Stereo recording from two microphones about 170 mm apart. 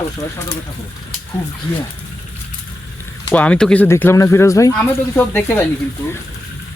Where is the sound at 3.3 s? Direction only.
5° left (ahead or behind).